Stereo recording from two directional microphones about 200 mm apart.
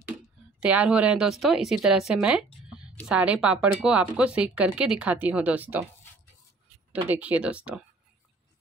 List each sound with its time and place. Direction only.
0.0 s speech: 5° right (ahead or behind)
6.9 s speech: 5° right (ahead or behind)